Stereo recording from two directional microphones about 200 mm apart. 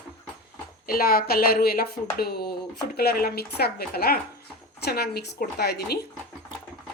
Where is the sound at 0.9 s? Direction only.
50° left (ahead or behind).